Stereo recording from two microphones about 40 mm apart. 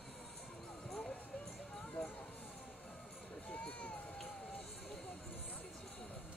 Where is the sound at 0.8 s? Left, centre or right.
Centre.